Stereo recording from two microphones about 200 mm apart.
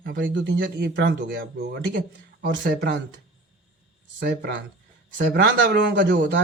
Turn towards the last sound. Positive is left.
turn(degrees=-60)  # may be behind; listen again after turning